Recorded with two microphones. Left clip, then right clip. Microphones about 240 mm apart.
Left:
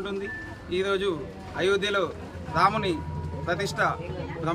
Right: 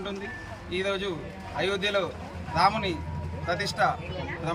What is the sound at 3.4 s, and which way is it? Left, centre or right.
Speech, left.